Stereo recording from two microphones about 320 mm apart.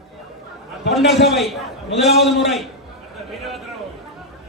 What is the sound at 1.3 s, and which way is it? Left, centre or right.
A man's voice, centre.